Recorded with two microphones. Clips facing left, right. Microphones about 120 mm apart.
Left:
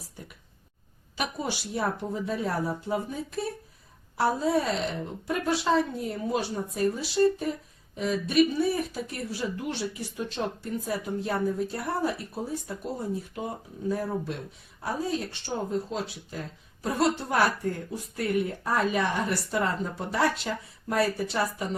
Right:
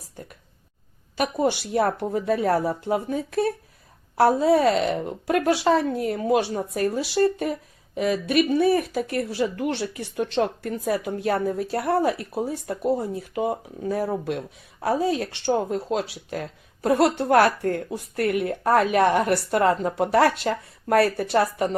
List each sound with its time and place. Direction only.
1.1 s speech: 55° right (ahead or behind); by 9.2 s 75° right (ahead or behind)
9.4 s speech: 65° right (ahead or behind)